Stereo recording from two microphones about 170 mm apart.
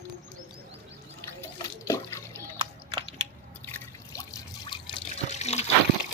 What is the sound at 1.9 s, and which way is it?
Water, 15° left (ahead or behind).